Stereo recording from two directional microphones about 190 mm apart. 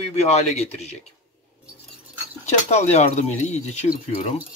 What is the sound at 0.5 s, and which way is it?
Speech, 35° left (ahead or behind).